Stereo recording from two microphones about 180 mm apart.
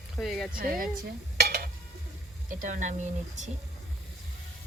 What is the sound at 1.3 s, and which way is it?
Stir, 55° right (ahead or behind).